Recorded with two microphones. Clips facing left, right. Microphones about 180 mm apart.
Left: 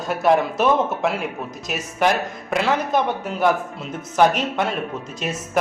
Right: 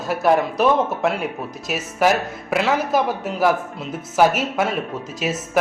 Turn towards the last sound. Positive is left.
turn(degrees=0)  # may be behind; listen again after turning